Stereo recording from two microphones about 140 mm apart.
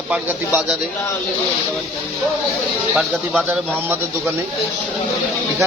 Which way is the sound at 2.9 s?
5° right (ahead or behind).